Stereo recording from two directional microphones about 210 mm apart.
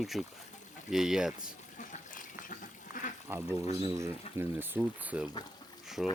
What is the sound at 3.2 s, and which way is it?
Speech, 10° right (ahead or behind).